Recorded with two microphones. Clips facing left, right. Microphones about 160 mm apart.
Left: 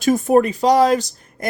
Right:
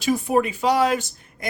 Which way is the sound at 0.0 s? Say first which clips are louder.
Left 6 dB; 45° left (ahead or behind).